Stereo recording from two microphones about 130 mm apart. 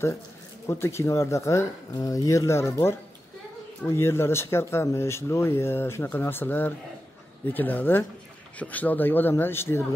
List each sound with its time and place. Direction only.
0.7 s speech: 20° left (ahead or behind)